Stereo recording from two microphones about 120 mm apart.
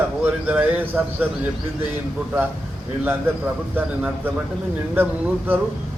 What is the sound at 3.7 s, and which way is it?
Speech, 15° right (ahead or behind).